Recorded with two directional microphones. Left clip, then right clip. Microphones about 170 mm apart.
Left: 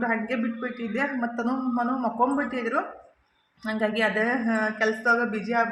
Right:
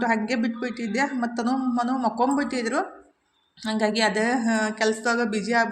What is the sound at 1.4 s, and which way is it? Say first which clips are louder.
A woman's voice: right 2 dB; 20° right (ahead or behind).